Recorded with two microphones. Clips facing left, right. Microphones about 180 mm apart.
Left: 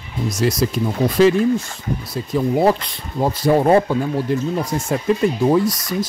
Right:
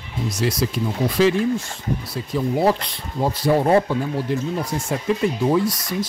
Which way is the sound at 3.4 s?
45° left (ahead or behind).